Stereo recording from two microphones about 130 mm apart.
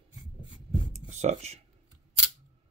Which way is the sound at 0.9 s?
60° right (ahead or behind).